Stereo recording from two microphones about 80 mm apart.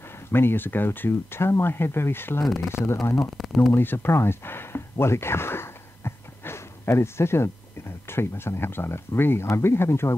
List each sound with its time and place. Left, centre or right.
0.3 s speech: left
2.4 s speech: centre
2.7 s speech: left
3.3 s speech: centre
3.7 s speech: left